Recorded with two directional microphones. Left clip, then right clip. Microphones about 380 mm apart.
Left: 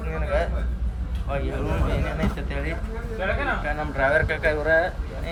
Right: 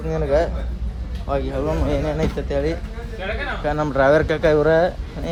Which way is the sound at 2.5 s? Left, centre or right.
Right.